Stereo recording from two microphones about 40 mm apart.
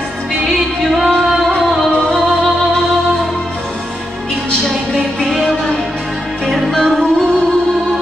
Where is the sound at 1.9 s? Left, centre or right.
Left.